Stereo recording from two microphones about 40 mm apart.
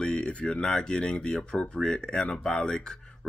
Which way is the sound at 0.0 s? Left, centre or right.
Left.